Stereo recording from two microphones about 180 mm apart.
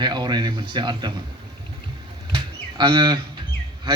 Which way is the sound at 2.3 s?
25° right (ahead or behind).